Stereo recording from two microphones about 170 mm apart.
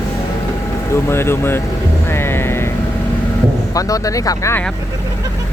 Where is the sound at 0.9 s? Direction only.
15° left (ahead or behind).